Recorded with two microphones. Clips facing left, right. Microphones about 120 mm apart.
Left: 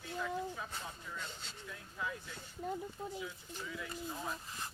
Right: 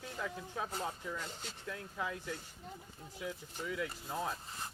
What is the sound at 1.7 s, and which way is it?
Speech, 75° right (ahead or behind).